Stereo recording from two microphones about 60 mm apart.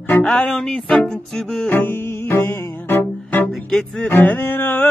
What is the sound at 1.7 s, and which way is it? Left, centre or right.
Music, left.